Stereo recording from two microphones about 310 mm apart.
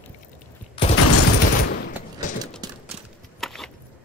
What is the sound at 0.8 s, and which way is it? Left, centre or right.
Fusillade, centre.